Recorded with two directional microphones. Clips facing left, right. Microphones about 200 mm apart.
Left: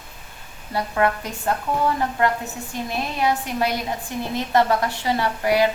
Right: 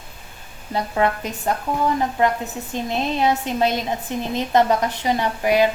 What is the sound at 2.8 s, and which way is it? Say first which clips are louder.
A woman's voice: right 3 dB; 25° right (ahead or behind).